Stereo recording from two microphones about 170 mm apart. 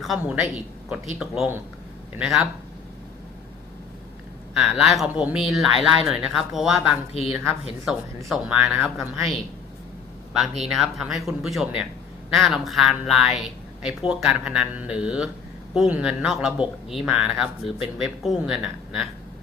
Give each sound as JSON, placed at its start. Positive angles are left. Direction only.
{"t": 0.9, "sound": "speech", "side_deg": -5}
{"t": 4.5, "sound": "speech", "side_deg": 0}
{"t": 7.1, "sound": "a woman's voice", "side_deg": 35}
{"t": 8.3, "sound": "speech", "side_deg": -5}